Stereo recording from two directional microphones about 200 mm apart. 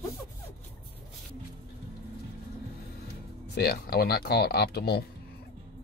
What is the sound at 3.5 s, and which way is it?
Speech, 50° left (ahead or behind).